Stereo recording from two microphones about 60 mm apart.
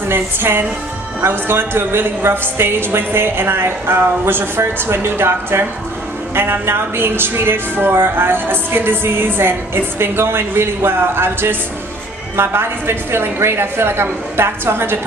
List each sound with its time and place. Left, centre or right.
0.1 s a woman's voice: right